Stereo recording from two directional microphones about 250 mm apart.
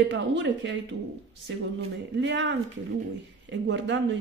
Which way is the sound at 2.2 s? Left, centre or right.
Right.